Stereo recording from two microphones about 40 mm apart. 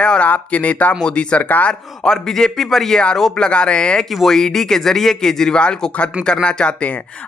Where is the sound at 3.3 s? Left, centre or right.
Left.